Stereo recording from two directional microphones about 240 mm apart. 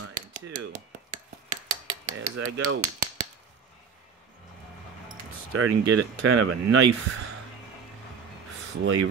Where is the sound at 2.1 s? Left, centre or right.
Right.